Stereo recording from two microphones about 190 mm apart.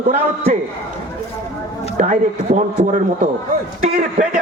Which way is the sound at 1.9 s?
40° right (ahead or behind).